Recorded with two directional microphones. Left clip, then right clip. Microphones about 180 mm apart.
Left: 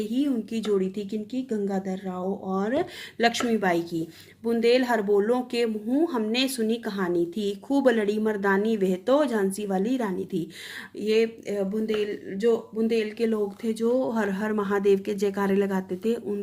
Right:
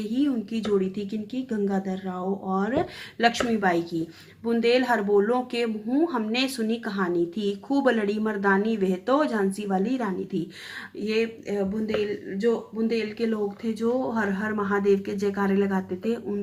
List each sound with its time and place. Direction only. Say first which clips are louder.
0.0 s speech: right 1 dB; 50° left (ahead or behind)